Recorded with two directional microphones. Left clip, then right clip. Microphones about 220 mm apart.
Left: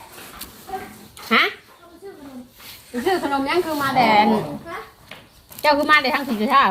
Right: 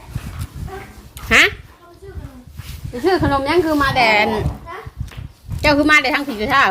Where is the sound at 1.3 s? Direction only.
40° right (ahead or behind).